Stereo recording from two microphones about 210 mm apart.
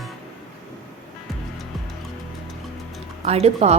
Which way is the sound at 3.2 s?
30° right (ahead or behind).